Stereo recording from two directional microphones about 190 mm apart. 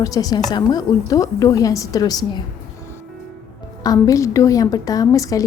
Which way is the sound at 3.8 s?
20° left (ahead or behind).